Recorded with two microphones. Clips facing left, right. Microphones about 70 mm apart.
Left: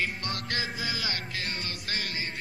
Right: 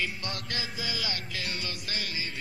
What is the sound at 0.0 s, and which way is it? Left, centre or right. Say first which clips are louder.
Music: left 2 dB; left.